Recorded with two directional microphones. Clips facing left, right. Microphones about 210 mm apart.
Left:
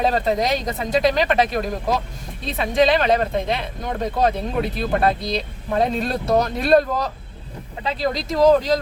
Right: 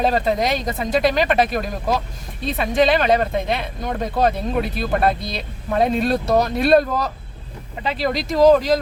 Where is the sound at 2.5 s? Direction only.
Centre (ahead or behind).